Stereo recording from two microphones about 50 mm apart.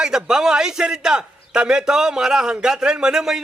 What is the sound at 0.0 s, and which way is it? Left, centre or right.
A man's voice, centre.